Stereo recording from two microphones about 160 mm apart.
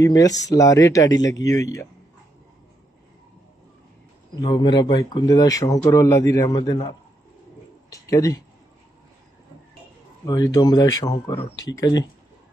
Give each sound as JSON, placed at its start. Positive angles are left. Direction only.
{"t": 0.0, "sound": "speech", "side_deg": 20}
{"t": 4.4, "sound": "speech", "side_deg": 30}
{"t": 6.6, "sound": "a man's voice", "side_deg": 30}
{"t": 7.9, "sound": "speech", "side_deg": 20}
{"t": 10.2, "sound": "speech", "side_deg": 20}